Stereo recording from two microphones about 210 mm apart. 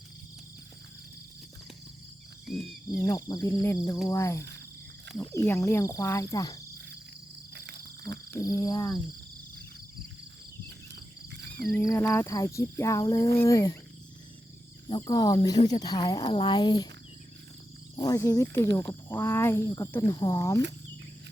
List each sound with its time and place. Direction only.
3.0 s speech: 15° left (ahead or behind)
8.4 s speech: 15° left (ahead or behind)
11.3 s a sound: 55° right (ahead or behind)
11.8 s speech: 15° left (ahead or behind)
14.8 s speech: 20° left (ahead or behind)
17.9 s speech: 15° left (ahead or behind)